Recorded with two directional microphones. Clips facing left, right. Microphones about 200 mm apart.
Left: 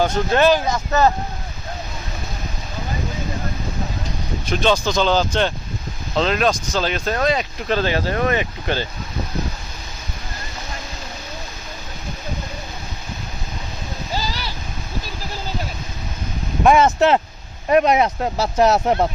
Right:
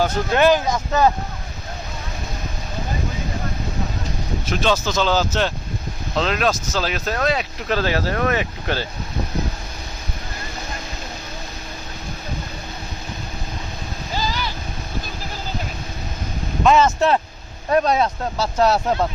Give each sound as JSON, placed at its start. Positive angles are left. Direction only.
{"t": 0.0, "sound": "speech", "side_deg": -15}
{"t": 4.4, "sound": "speech", "side_deg": -5}
{"t": 14.3, "sound": "vehicle", "side_deg": 40}
{"t": 16.6, "sound": "speech", "side_deg": 15}